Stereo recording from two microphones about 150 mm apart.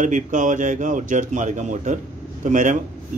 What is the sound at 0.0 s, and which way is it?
Speech, 60° right (ahead or behind).